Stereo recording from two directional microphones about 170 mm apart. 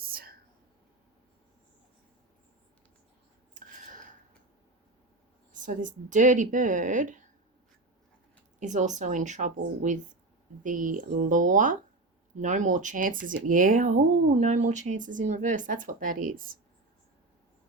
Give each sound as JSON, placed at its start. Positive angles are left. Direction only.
{"t": 0.0, "sound": "whispering", "side_deg": -60}
{"t": 5.5, "sound": "speech", "side_deg": -50}
{"t": 8.5, "sound": "speech", "side_deg": -45}